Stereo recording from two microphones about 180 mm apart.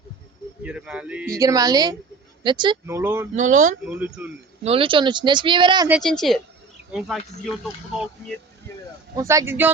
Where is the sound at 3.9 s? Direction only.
10° right (ahead or behind).